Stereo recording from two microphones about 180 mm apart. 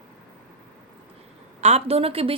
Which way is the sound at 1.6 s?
35° right (ahead or behind).